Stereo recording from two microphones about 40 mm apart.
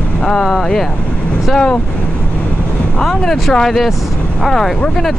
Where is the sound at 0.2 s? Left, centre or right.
Centre.